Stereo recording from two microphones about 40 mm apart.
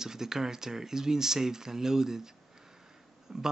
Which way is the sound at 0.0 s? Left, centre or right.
Centre.